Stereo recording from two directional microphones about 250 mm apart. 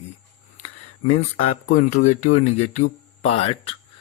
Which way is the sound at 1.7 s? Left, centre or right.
Left.